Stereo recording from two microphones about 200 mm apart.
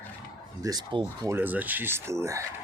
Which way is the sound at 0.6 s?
20° right (ahead or behind).